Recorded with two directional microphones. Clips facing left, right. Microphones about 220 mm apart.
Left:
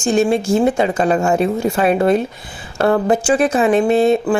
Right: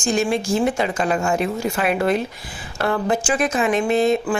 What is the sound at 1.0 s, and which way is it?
A woman's voice, 40° left (ahead or behind).